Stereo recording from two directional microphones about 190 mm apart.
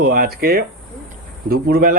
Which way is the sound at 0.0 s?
50° right (ahead or behind).